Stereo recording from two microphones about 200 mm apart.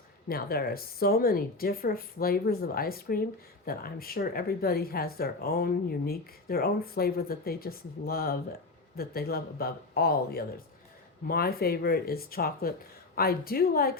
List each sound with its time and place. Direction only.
0.3 s speech: 50° left (ahead or behind)